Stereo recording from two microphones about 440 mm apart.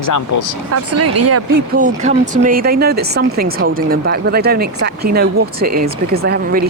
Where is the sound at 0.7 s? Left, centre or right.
Right.